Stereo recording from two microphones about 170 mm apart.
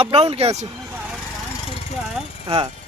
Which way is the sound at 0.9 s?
10° right (ahead or behind).